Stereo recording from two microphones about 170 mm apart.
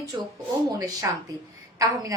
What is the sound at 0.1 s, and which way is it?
A woman's voice, 20° right (ahead or behind).